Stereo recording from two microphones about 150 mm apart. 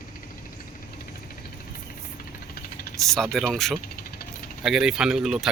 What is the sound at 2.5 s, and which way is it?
Engine, 85° left.